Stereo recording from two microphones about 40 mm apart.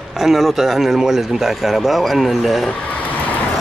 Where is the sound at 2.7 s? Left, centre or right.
Left.